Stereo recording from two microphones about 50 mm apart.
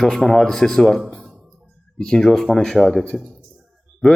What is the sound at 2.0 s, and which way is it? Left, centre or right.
A man's voice, centre.